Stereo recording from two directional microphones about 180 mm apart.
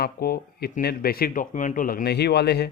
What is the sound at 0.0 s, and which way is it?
Speech, 60° left (ahead or behind).